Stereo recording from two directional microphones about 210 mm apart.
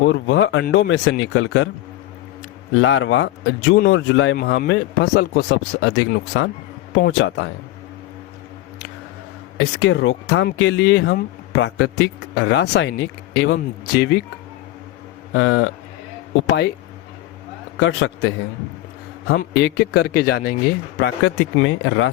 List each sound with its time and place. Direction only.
0.1 s speech: 60° left (ahead or behind)
2.7 s speech: 65° left (ahead or behind)
4.4 s a man's voice: 50° left (ahead or behind)
9.6 s speech: 65° left (ahead or behind); by 14.2 s 50° left (ahead or behind)
15.3 s speech: 60° left (ahead or behind)
17.7 s speech: 65° left (ahead or behind); by 20.6 s 45° left (ahead or behind)
21.0 s speech: 65° left (ahead or behind)